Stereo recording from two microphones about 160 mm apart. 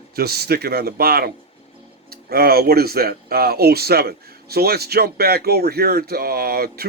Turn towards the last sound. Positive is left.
turn(degrees=-70)  # may be behind; listen again after turning